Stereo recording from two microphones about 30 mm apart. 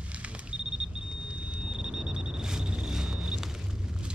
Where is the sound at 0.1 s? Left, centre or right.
Right.